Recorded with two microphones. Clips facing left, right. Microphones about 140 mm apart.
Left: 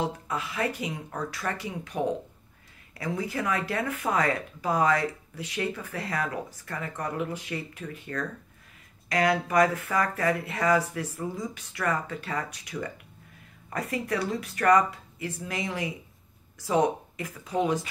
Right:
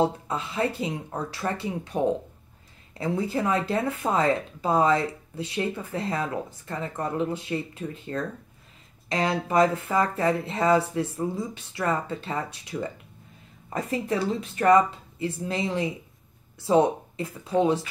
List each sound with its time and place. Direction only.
0.0 s speech: 30° right (ahead or behind)